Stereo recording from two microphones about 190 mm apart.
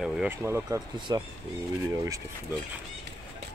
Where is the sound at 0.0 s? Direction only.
5° right (ahead or behind); by 1.2 s 20° right (ahead or behind).